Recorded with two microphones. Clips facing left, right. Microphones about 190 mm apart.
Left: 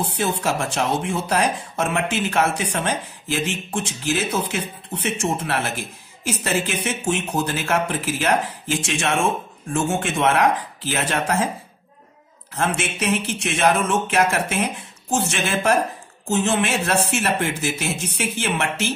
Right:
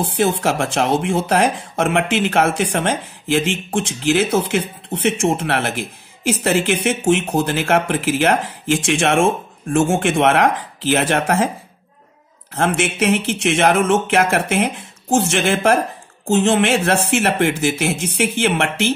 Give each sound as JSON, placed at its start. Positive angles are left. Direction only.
{"t": 0.2, "sound": "speech", "side_deg": -55}
{"t": 12.5, "sound": "speech", "side_deg": -55}